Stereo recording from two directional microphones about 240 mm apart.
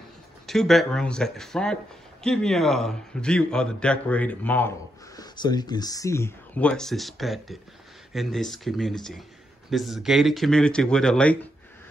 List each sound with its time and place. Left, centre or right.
0.5 s speech: centre